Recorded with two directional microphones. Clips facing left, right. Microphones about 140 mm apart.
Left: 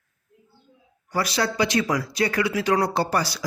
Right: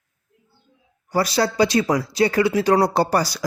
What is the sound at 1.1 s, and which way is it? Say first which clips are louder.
Speech: right 5 dB; 35° right (ahead or behind).